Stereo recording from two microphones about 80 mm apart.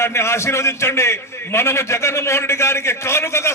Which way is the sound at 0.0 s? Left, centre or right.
Left.